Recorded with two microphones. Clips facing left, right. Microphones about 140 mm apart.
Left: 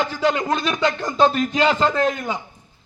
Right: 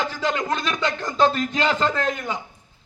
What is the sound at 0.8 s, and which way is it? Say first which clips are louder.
A man's voice: left 2 dB; 15° left (ahead or behind).